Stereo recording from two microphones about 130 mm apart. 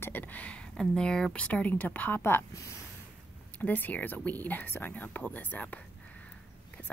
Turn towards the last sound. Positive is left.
turn(degrees=10)  # may be behind; listen again after turning